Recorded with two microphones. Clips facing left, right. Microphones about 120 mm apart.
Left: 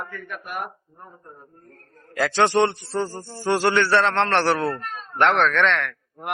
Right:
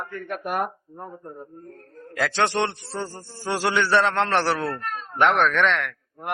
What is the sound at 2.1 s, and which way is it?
A man's voice, centre (ahead or behind).